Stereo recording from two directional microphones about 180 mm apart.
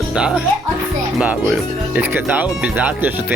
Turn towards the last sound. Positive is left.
turn(degrees=-10)  # may be behind; listen again after turning